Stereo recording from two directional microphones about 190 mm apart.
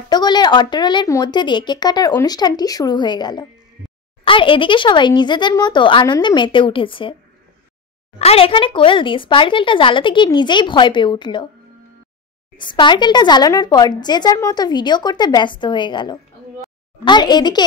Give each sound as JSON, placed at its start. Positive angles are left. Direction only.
{"t": 0.1, "sound": "speech", "side_deg": 20}
{"t": 8.2, "sound": "speech", "side_deg": 30}
{"t": 12.5, "sound": "speech", "side_deg": 25}